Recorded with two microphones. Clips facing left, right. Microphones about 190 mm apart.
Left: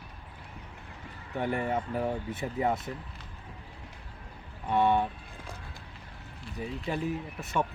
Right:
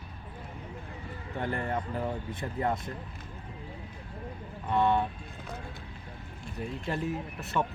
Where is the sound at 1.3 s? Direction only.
10° left (ahead or behind).